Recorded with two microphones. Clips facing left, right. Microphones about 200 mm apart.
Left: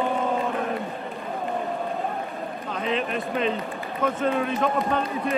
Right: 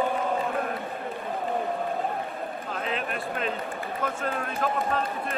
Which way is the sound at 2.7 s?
Centre (ahead or behind).